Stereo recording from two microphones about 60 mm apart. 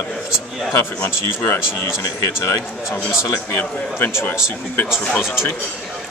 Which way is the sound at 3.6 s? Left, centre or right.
Left.